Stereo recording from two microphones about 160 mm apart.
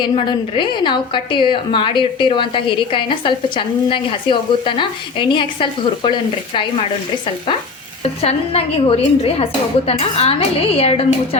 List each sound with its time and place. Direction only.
0.0 s a woman's voice: 30° left (ahead or behind)
8.2 s a woman's voice: 40° left (ahead or behind)